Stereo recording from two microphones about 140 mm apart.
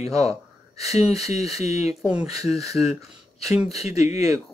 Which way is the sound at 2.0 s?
5° right (ahead or behind).